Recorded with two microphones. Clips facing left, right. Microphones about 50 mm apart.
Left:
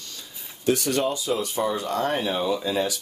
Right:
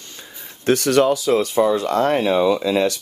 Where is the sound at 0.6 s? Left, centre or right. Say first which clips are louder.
Right 7 dB; right.